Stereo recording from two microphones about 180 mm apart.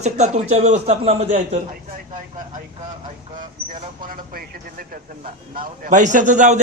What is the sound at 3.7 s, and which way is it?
Speech, 50° right (ahead or behind).